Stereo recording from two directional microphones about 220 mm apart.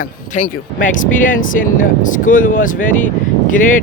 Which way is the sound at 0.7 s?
35° left (ahead or behind).